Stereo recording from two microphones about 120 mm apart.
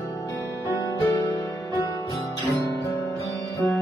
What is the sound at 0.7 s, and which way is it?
Music, 30° left (ahead or behind).